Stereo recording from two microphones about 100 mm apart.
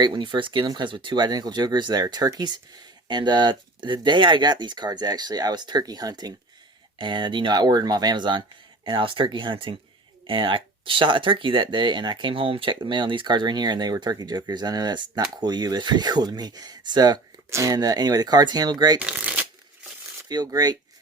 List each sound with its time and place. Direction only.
0.0 s speech: 55° right (ahead or behind)
18.9 s shuffling cards: 15° right (ahead or behind)
20.2 s speech: 40° right (ahead or behind)